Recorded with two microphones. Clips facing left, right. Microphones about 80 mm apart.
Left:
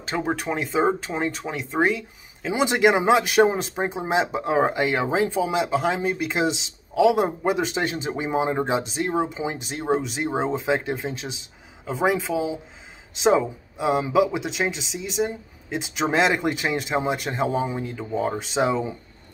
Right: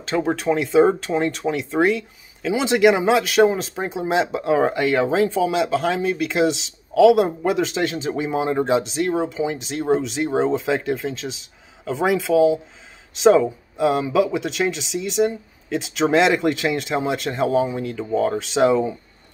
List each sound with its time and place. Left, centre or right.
0.1 s speech: centre
12.3 s speech: left
13.2 s speech: centre